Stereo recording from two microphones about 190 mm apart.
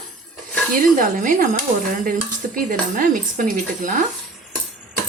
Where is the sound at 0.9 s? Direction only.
45° right (ahead or behind).